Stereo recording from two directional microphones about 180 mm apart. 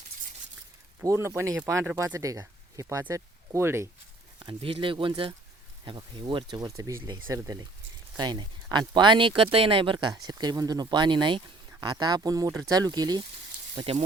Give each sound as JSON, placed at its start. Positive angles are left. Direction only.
{"t": 1.0, "sound": "speech", "side_deg": -15}
{"t": 4.4, "sound": "speech", "side_deg": -30}